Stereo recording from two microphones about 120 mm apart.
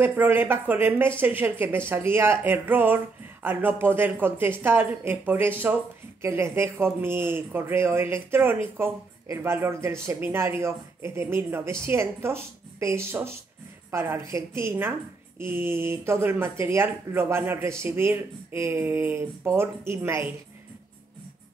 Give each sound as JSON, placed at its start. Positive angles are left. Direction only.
{"t": 0.0, "sound": "speech", "side_deg": -15}